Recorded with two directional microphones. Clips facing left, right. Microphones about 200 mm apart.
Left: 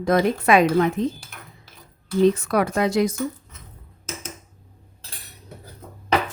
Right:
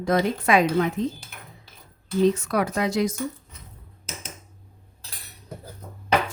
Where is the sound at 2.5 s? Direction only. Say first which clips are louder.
Left 3 dB; 60° left (ahead or behind).